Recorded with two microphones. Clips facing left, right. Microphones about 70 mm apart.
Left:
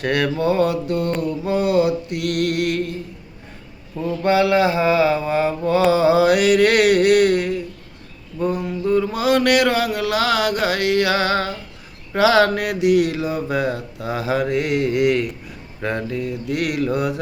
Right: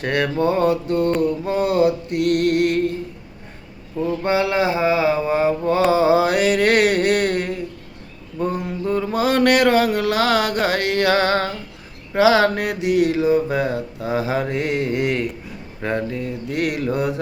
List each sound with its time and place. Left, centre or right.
0.0 s mantra: right
4.1 s mantra: right
12.1 s mantra: right